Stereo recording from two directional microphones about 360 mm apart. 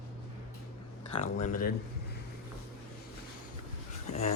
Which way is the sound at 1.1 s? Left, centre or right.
Left.